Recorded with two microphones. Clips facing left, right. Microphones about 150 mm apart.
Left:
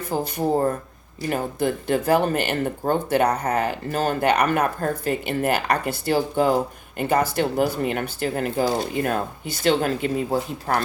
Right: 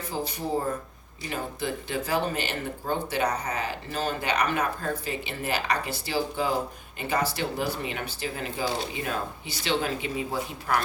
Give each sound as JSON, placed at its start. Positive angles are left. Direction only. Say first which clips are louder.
{"t": 0.0, "sound": "speech", "louder": "left 7 dB", "side_deg": 50}
{"t": 10.7, "sound": "speech", "louder": "left 3 dB", "side_deg": 35}